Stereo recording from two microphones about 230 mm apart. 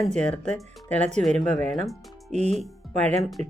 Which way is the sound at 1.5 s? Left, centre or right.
Right.